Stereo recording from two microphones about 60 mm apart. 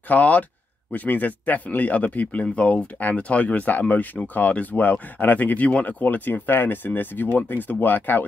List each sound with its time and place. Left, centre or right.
0.1 s speech: left